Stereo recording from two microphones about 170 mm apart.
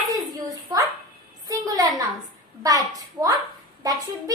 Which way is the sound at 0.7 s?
25° right (ahead or behind).